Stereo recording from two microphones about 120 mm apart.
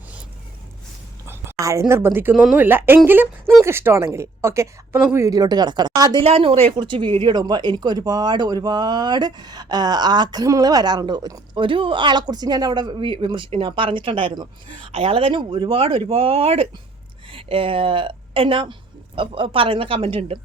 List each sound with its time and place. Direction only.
1.3 s a woman's voice: 25° right (ahead or behind)
6.2 s speech: 55° right (ahead or behind)
6.7 s a woman's voice: 40° right (ahead or behind)